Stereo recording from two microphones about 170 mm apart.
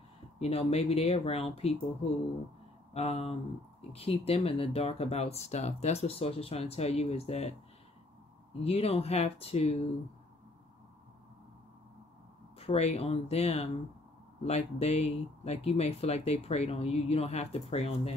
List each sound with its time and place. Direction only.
0.4 s speech: 35° left (ahead or behind)
2.9 s speech: 35° left (ahead or behind)
8.6 s speech: 35° left (ahead or behind)
12.5 s speech: 35° left (ahead or behind)